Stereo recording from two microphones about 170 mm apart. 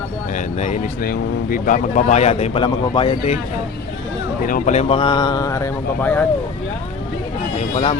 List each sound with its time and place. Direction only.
0.3 s a sound: 45° left (ahead or behind)
1.0 s speech: 60° left (ahead or behind); by 3.3 s 30° left (ahead or behind)
4.4 s speech: 50° left (ahead or behind)
4.9 s speech: 25° left (ahead or behind)